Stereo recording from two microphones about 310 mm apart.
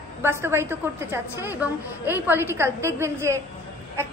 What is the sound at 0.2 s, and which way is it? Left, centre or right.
A woman's voice, centre.